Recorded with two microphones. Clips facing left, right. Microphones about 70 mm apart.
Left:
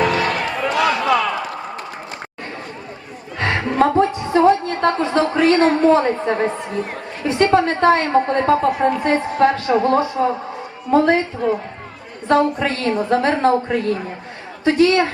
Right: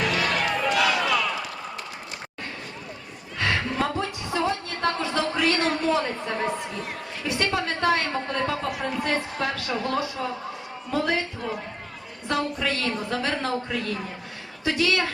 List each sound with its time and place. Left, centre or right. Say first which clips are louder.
0.0 s music: left 6 dB; left
3.3 s a woman's voice: left 7 dB; left